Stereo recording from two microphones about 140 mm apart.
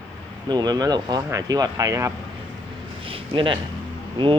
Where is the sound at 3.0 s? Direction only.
40° right (ahead or behind).